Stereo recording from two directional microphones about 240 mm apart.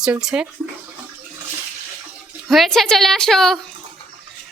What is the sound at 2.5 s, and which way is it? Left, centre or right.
A woman's voice, centre.